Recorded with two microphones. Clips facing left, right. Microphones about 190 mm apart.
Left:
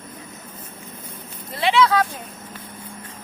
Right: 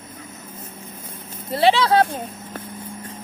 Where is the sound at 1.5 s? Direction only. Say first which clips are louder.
Right 2 dB; 35° right (ahead or behind).